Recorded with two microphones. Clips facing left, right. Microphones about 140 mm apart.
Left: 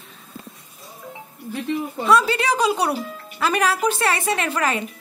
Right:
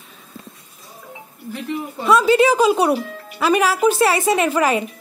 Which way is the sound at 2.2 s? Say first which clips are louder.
Right 7 dB; 10° right (ahead or behind).